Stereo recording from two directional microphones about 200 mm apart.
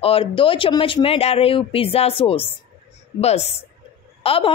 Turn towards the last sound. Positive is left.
turn(degrees=25)  # may be behind; listen again after turning